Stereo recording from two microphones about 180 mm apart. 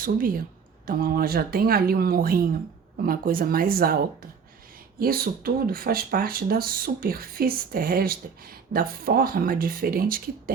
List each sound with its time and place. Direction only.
0.0 s speech: 50° right (ahead or behind)